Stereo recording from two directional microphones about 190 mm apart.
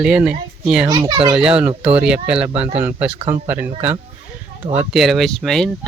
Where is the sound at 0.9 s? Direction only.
20° right (ahead or behind).